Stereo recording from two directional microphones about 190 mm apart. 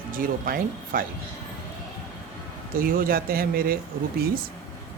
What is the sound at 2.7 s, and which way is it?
Speech, 50° right (ahead or behind).